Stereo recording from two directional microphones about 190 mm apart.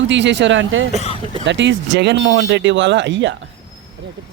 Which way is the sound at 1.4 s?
70° right (ahead or behind).